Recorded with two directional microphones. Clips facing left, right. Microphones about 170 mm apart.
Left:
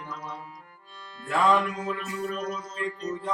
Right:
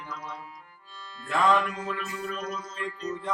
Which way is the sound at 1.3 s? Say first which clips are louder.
Left 1 dB; 10° left (ahead or behind).